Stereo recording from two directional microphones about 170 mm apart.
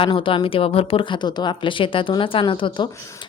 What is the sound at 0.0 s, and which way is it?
Speech, 30° left (ahead or behind).